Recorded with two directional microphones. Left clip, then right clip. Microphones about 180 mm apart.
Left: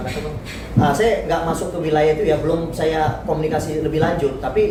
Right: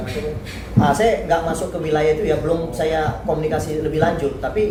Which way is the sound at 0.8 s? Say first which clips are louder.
Even; 10° right (ahead or behind).